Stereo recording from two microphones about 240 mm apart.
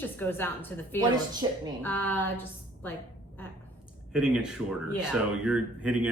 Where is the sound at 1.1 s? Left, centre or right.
Centre.